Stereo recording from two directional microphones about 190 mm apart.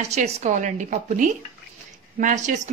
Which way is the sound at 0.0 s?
35° right (ahead or behind).